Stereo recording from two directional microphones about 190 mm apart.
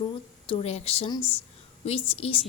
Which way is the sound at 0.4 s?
30° left (ahead or behind).